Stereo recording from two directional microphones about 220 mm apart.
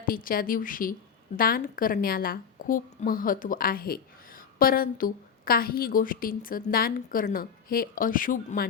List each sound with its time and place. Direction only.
0.0 s a woman's voice: 40° left (ahead or behind)